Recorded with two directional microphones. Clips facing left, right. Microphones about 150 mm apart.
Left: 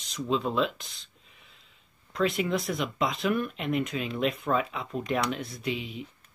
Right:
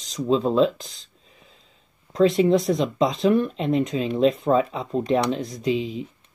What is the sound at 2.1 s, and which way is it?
Speech, 30° right (ahead or behind).